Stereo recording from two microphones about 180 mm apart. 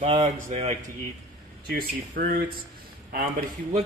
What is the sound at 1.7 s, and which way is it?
Speech, 55° right (ahead or behind).